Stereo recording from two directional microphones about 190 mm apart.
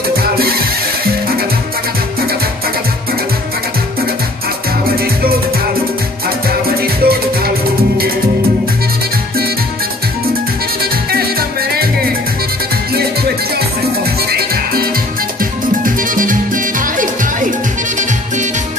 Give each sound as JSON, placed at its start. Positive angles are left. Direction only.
{"t": 0.2, "sound": "music", "side_deg": -50}
{"t": 6.8, "sound": "music", "side_deg": -55}
{"t": 10.8, "sound": "music", "side_deg": -55}
{"t": 14.3, "sound": "music", "side_deg": -55}